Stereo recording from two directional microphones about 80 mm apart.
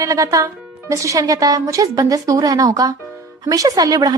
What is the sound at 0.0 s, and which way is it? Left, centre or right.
Speech, right.